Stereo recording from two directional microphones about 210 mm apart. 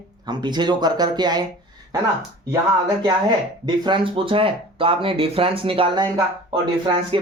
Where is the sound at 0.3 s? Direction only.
20° right (ahead or behind).